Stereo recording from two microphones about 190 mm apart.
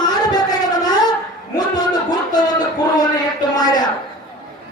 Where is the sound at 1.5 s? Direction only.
20° left (ahead or behind).